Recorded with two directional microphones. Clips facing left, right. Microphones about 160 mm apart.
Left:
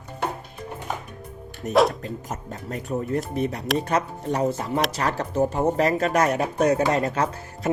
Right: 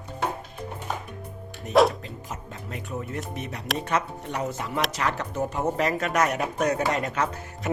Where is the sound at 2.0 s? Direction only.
45° left (ahead or behind).